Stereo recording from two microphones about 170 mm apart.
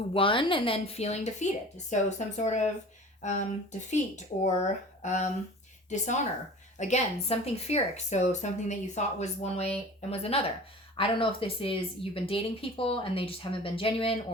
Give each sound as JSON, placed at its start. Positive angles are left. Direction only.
{"t": 0.1, "sound": "a woman's voice", "side_deg": 30}